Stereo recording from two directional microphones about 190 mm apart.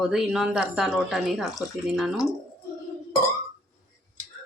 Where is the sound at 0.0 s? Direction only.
Centre (ahead or behind).